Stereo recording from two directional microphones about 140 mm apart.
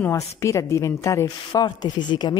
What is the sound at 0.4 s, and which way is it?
A woman's voice, 20° left (ahead or behind).